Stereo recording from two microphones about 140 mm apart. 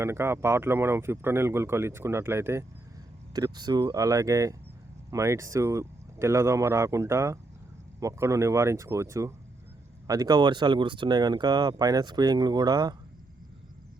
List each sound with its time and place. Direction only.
0.0 s speech: 20° right (ahead or behind)
3.3 s speech: 30° right (ahead or behind)